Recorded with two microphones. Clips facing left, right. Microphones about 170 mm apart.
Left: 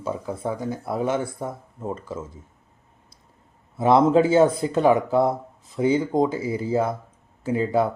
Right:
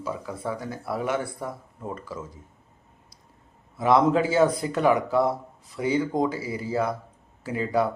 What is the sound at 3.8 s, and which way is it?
Speech, 25° left (ahead or behind).